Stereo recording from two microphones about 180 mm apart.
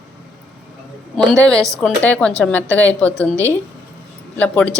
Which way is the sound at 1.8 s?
5° left (ahead or behind).